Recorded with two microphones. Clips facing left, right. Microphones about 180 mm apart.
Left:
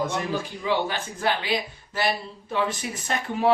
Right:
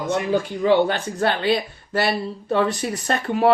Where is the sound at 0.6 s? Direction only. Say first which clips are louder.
Right 9 dB; 55° right (ahead or behind).